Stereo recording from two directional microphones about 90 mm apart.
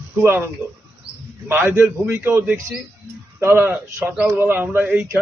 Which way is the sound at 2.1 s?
25° right (ahead or behind).